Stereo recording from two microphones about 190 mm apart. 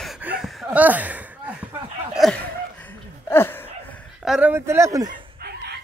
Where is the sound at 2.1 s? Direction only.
5° left (ahead or behind).